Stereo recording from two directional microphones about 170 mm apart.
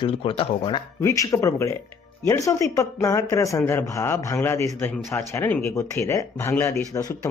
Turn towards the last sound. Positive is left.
turn(degrees=15)  # may be behind; listen again after turning